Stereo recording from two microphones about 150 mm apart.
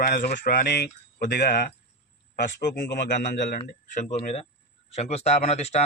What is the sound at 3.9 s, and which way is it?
Speech, 55° left (ahead or behind).